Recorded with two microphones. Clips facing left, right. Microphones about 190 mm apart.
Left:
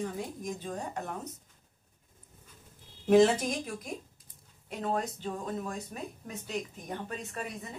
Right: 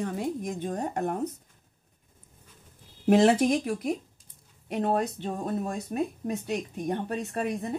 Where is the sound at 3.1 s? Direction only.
70° right (ahead or behind).